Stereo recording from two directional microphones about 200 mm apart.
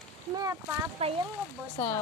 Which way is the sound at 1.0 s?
30° right (ahead or behind).